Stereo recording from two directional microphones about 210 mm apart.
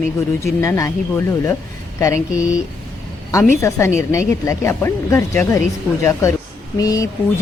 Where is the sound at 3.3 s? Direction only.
15° left (ahead or behind).